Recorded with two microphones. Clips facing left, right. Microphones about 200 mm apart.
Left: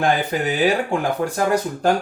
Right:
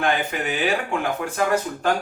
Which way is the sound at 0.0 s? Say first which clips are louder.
Left 4 dB; 35° left (ahead or behind).